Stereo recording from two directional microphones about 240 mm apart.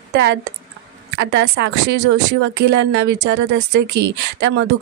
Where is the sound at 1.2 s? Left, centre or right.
Right.